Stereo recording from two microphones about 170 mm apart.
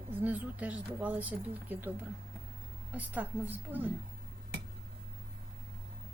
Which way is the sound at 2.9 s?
10° right (ahead or behind).